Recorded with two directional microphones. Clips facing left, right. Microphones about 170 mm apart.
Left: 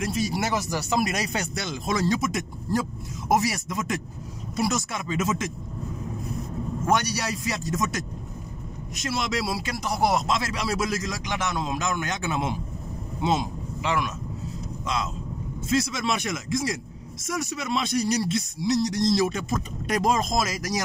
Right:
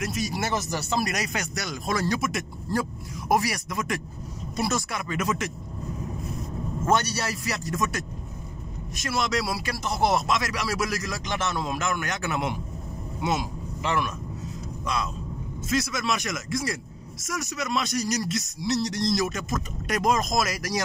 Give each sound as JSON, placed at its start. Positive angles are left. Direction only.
{"t": 0.0, "sound": "speech", "side_deg": 30}
{"t": 0.5, "sound": "speech", "side_deg": 10}
{"t": 1.1, "sound": "speech", "side_deg": 30}
{"t": 6.9, "sound": "speech", "side_deg": 15}
{"t": 9.8, "sound": "speech", "side_deg": 10}
{"t": 10.2, "sound": "speech", "side_deg": 25}
{"t": 15.7, "sound": "speech", "side_deg": 30}
{"t": 18.7, "sound": "speech", "side_deg": 15}